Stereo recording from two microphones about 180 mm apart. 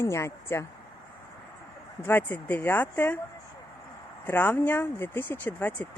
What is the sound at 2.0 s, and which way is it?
Speech, 10° left (ahead or behind).